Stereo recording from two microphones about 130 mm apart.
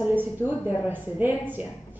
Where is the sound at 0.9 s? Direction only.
15° right (ahead or behind).